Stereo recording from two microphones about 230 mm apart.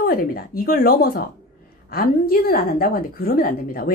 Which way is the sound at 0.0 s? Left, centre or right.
Left.